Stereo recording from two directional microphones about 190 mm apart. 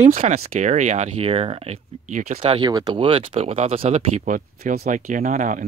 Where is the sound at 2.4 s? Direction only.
25° right (ahead or behind).